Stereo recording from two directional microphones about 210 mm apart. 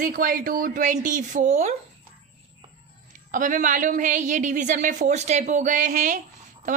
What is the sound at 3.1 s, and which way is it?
Speech, 40° right (ahead or behind).